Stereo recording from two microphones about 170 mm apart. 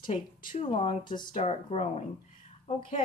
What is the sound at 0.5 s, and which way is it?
A woman's voice, 35° left (ahead or behind).